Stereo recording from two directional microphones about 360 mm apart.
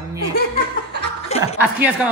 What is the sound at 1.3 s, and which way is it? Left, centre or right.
Chuckle, centre.